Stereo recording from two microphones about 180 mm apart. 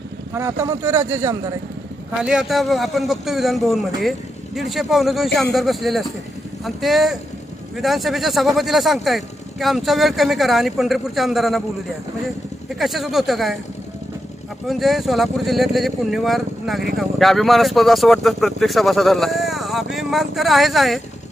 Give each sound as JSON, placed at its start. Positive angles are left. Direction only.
{"t": 0.3, "sound": "speech", "side_deg": -15}
{"t": 2.2, "sound": "speech", "side_deg": -5}
{"t": 12.8, "sound": "speech", "side_deg": 0}
{"t": 14.7, "sound": "speech", "side_deg": 0}